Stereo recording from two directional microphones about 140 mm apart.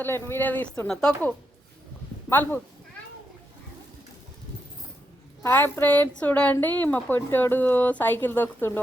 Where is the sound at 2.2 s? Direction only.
15° left (ahead or behind).